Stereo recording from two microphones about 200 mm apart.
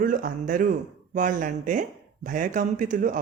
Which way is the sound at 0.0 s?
40° right (ahead or behind).